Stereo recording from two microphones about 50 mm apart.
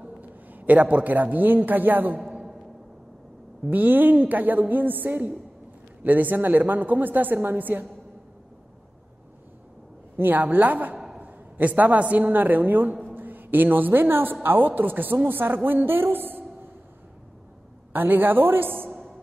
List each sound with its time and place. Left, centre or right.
0.0 s a man's voice: right
2.3 s a sound: centre
3.7 s a woman's voice: right
10.1 s a woman's voice: right
17.9 s a woman's voice: right
18.9 s music: centre